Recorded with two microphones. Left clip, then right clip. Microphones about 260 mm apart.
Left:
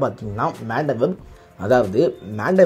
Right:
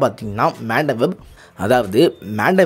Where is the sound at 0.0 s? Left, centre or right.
Right.